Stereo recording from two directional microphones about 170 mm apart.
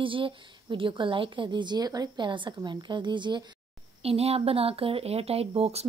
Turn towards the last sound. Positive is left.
turn(degrees=-35)  # may be behind; listen again after turning